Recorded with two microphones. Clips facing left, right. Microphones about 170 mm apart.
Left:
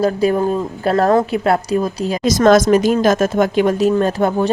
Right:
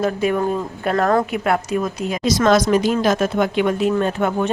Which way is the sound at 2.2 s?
45° left (ahead or behind).